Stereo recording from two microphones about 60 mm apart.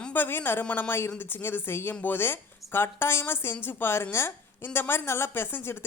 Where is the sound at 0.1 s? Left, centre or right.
Left.